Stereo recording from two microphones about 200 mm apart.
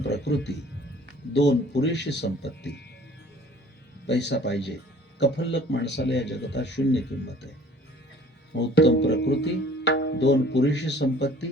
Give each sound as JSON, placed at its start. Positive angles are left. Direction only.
{"t": 0.0, "sound": "music", "side_deg": 60}
{"t": 1.3, "sound": "speech", "side_deg": 60}
{"t": 4.0, "sound": "speech", "side_deg": 60}
{"t": 8.5, "sound": "speech", "side_deg": 60}